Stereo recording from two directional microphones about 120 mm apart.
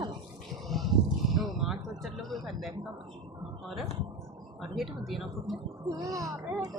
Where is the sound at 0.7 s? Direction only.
Centre (ahead or behind).